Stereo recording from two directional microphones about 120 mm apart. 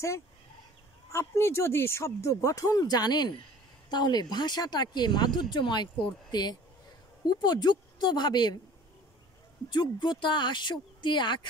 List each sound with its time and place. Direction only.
1.1 s speech: 20° left (ahead or behind); by 8.5 s 35° left (ahead or behind)
9.7 s speech: 40° left (ahead or behind)